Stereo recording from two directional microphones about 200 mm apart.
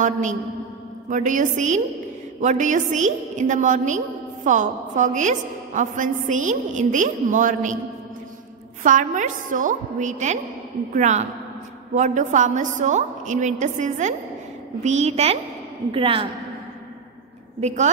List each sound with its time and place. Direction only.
0.0 s a woman's voice: 35° right (ahead or behind)
8.8 s a woman's voice: 40° right (ahead or behind)
17.6 s a woman's voice: 35° right (ahead or behind)